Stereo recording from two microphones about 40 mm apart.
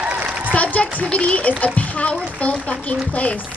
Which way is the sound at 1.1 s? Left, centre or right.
Left.